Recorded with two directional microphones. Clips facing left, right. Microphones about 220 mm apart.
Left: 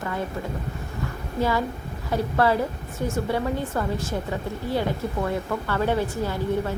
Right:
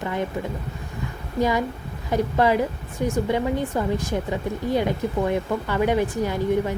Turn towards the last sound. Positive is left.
turn(degrees=-15)  # may be behind; listen again after turning